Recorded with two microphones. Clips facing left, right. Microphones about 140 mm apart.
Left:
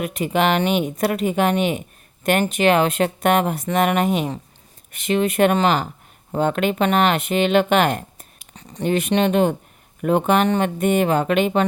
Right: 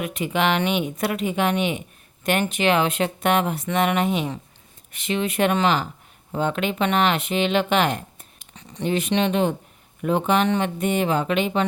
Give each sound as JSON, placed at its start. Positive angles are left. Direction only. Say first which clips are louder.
{"t": 0.0, "sound": "speech", "louder": "left 3 dB", "side_deg": 40}